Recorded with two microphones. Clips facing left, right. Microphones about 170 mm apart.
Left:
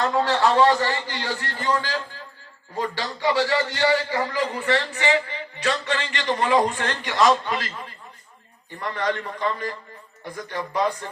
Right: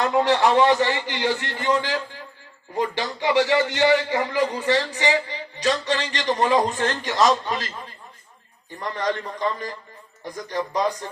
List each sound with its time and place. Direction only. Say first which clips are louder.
0.0 s a man's voice: right 2 dB; 15° right (ahead or behind)
4.9 s speech: even; 35° right (ahead or behind)
9.0 s speech: right 1 dB; 40° right (ahead or behind)